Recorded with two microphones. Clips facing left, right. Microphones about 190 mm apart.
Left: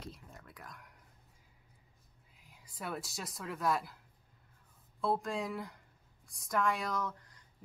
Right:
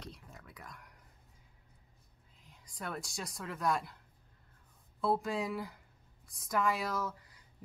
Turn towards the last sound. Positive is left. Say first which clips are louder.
# even
turn(degrees=-5)  # may be behind; listen again after turning